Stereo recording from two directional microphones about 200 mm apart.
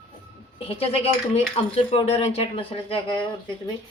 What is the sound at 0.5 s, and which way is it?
A woman's voice, 30° left (ahead or behind).